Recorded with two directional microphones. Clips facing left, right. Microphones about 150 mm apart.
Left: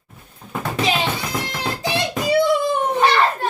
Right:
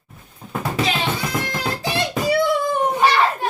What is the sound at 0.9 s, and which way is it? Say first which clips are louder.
Music: even; 20° left (ahead or behind).